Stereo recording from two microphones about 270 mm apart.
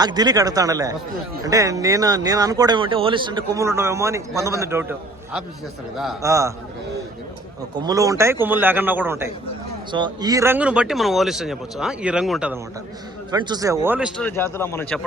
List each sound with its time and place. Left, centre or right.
0.0 s speech: centre
7.8 s speech: centre
13.3 s speech: centre
14.2 s speech: centre